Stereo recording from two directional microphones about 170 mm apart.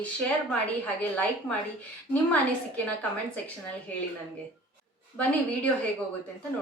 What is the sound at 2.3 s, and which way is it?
Speech, 10° left (ahead or behind).